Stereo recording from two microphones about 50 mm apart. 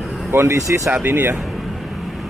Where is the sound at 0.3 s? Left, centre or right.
Right.